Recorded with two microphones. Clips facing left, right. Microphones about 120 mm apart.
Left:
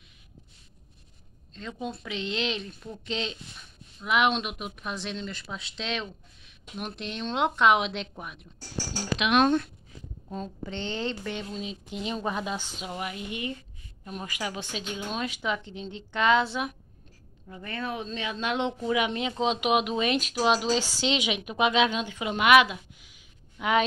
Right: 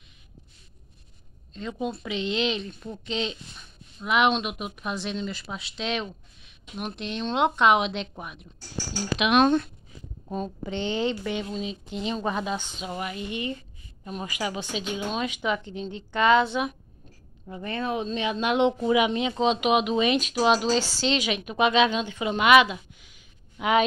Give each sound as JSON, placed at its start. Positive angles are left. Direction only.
{"t": 1.5, "sound": "speech", "side_deg": -5}
{"t": 10.3, "sound": "a woman's voice", "side_deg": -15}
{"t": 11.6, "sound": "speech", "side_deg": 5}
{"t": 17.5, "sound": "speech", "side_deg": -25}
{"t": 19.4, "sound": "speech", "side_deg": 5}
{"t": 21.0, "sound": "speech", "side_deg": 15}
{"t": 23.6, "sound": "speech", "side_deg": -5}